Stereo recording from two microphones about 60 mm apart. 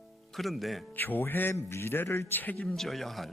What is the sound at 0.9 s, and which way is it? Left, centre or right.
Speech, left.